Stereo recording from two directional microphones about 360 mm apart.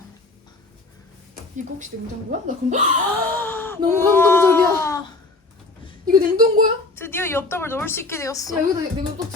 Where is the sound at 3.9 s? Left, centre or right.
Centre.